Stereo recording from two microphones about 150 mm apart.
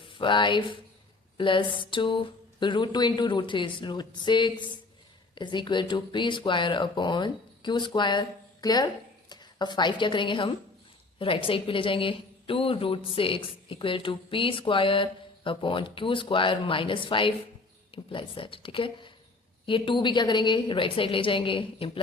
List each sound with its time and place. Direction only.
0.1 s a woman's voice: 30° left (ahead or behind)